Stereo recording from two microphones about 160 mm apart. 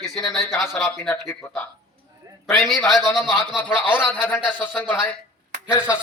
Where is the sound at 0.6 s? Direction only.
Centre (ahead or behind).